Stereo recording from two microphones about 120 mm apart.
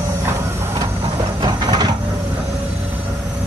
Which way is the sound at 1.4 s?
35° right (ahead or behind).